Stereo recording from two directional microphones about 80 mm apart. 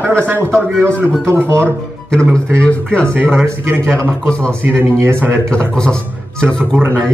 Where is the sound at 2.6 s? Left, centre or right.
Centre.